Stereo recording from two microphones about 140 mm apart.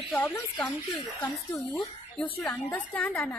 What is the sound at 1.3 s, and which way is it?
Speech, centre (ahead or behind).